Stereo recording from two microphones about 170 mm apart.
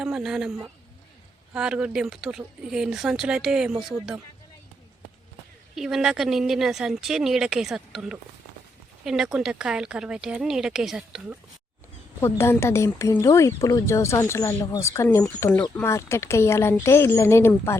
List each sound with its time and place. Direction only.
0.0 s speech: 5° right (ahead or behind)
5.7 s speech: 5° right (ahead or behind)
12.2 s speech: 15° left (ahead or behind)